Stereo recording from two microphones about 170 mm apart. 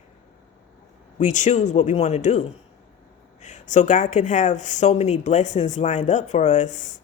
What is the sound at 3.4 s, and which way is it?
Speech, 45° left (ahead or behind).